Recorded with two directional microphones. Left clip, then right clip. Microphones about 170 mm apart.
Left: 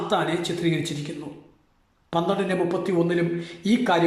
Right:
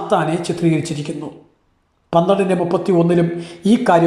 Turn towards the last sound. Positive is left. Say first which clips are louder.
# right 8 dB
turn(degrees=-5)  # may be behind; listen again after turning